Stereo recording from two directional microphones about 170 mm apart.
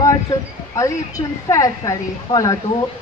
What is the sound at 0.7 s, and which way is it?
A woman's voice, 20° left (ahead or behind).